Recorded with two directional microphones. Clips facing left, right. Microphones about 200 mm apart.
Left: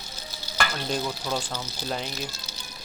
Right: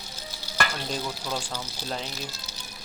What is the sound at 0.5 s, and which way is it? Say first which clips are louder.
Stir: left 2 dB; centre (ahead or behind).